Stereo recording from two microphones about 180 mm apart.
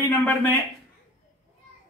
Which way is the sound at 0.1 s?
10° left (ahead or behind).